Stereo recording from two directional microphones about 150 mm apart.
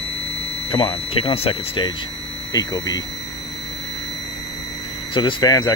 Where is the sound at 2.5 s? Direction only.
25° left (ahead or behind).